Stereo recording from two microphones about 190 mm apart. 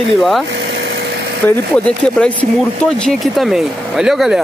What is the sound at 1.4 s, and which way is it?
Speech, 10° left (ahead or behind).